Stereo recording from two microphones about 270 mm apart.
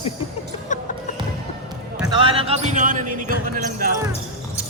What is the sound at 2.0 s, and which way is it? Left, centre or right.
Speech, centre.